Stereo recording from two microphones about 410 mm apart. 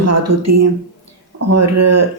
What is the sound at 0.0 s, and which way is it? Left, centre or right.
Speech, right.